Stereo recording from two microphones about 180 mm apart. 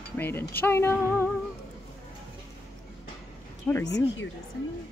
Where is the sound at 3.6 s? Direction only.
10° left (ahead or behind).